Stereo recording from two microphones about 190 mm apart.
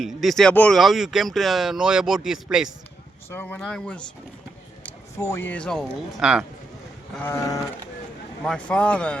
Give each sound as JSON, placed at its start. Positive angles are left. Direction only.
{"t": 0.0, "sound": "speech", "side_deg": 0}
{"t": 3.2, "sound": "speech", "side_deg": 10}
{"t": 7.2, "sound": "speech", "side_deg": 15}
{"t": 8.4, "sound": "speech", "side_deg": 5}